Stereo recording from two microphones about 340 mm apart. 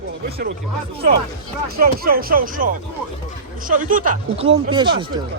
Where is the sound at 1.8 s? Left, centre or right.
Right.